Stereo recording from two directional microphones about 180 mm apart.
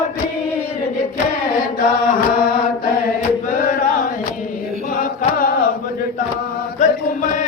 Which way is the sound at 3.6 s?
45° left (ahead or behind).